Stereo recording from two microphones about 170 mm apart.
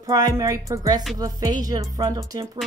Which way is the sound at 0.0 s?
20° right (ahead or behind).